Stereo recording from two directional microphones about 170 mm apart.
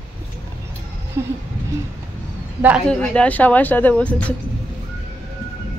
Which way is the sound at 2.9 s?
5° left (ahead or behind).